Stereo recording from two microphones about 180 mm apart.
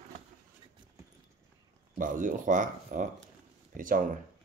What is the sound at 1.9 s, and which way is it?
Speech, 45° right (ahead or behind).